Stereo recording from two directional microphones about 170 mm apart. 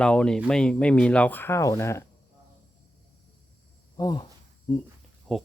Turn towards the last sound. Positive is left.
turn(degrees=0)  # may be behind; listen again after turning